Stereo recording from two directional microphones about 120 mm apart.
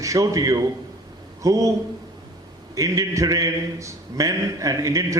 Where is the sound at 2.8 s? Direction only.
25° right (ahead or behind).